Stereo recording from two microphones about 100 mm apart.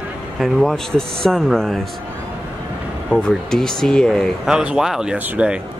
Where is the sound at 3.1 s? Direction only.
5° left (ahead or behind).